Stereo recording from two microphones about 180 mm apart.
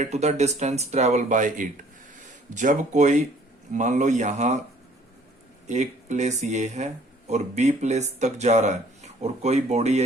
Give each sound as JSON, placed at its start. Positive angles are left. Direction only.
{"t": 0.0, "sound": "speech", "side_deg": -40}
{"t": 5.6, "sound": "speech", "side_deg": -40}